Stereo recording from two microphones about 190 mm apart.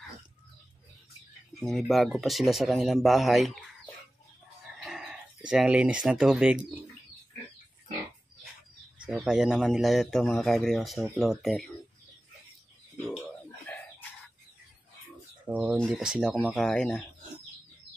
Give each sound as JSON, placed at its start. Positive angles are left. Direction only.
{"t": 1.6, "sound": "speech", "side_deg": 0}
{"t": 4.8, "sound": "chicken", "side_deg": -5}
{"t": 5.5, "sound": "speech", "side_deg": -5}
{"t": 8.9, "sound": "speech", "side_deg": -5}
{"t": 12.9, "sound": "a sound", "side_deg": 0}
{"t": 15.4, "sound": "speech", "side_deg": -5}